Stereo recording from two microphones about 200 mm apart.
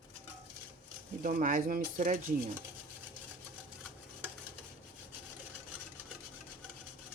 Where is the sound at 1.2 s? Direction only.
45° right (ahead or behind).